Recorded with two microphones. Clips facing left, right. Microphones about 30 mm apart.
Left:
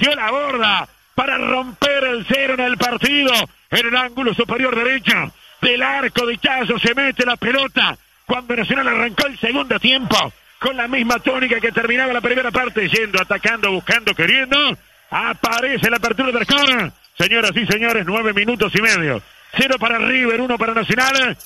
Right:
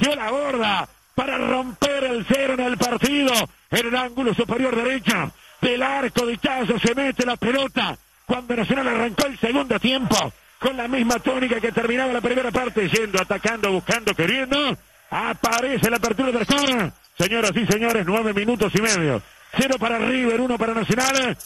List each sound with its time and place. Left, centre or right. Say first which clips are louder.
0.0 s a man's voice: left 5 dB; centre
1.4 s speech: left 3 dB; centre
1.8 s a man's voice: left 5 dB; left
9.1 s a man's voice: left 3 dB; left
9.8 s speech: left 5 dB; left
10.8 s a man's voice: left 5 dB; centre
17.9 s speech: left 3 dB; centre
18.7 s a man's voice: left 5 dB; left